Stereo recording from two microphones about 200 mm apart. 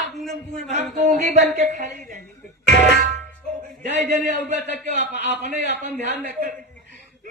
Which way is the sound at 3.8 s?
40° right (ahead or behind).